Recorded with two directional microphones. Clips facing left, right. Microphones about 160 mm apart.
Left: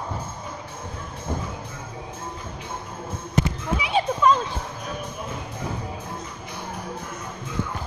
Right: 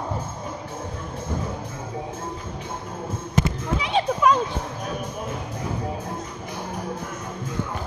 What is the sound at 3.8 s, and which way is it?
Children playing, 5° left (ahead or behind).